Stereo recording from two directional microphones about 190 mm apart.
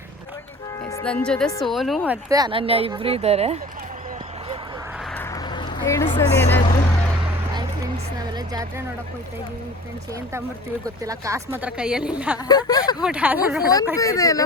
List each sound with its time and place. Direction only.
1.0 s a woman's voice: 5° left (ahead or behind)
2.3 s speech: 25° right (ahead or behind)
5.5 s a sound: 25° left (ahead or behind)
8.2 s music: 20° right (ahead or behind)
10.8 s a woman's voice: 15° right (ahead or behind)
12.5 s speech: 20° left (ahead or behind)
13.0 s a woman's voice: 5° right (ahead or behind)
13.9 s speech: 15° left (ahead or behind)